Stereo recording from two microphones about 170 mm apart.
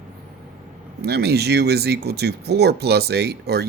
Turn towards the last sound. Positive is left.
turn(degrees=-75)  # may be behind; listen again after turning